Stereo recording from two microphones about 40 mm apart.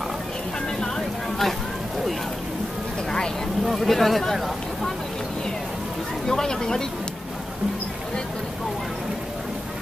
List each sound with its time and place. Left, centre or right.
0.7 s a sound: centre
3.6 s speech: centre
6.2 s speech: centre